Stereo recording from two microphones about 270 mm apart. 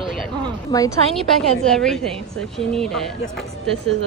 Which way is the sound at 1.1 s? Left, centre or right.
Centre.